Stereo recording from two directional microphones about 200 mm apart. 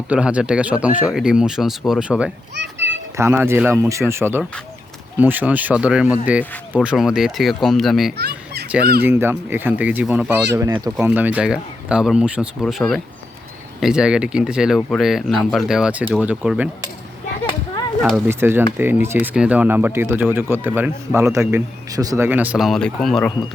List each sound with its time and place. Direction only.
0.1 s speech: 5° right (ahead or behind)
2.6 s children playing: 65° right (ahead or behind)
3.2 s speech: 10° right (ahead or behind)
8.2 s children playing: 55° right (ahead or behind)
8.8 s speech: 50° right (ahead or behind)
9.0 s speech: 10° right (ahead or behind)
18.3 s speech: 10° right (ahead or behind)